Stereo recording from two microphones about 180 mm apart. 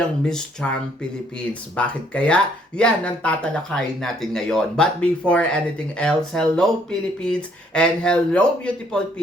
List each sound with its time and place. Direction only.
0.3 s speech: 5° left (ahead or behind)